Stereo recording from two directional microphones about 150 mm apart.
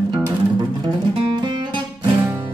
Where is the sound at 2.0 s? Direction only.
10° right (ahead or behind).